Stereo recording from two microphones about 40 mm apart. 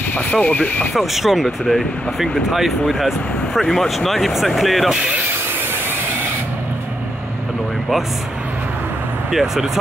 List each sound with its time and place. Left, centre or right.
0.1 s speech: left
0.9 s speech: centre
9.3 s speech: centre